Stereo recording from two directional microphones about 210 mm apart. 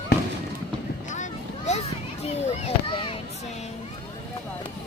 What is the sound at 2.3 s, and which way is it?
Speech, 30° left (ahead or behind).